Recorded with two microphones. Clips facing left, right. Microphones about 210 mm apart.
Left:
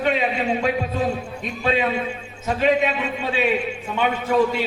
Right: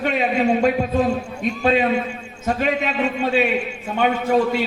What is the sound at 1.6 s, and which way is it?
A man's voice, 45° right (ahead or behind).